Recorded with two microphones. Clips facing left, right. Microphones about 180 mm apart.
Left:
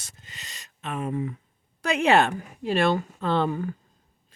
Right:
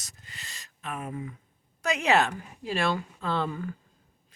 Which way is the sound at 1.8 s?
55° left (ahead or behind).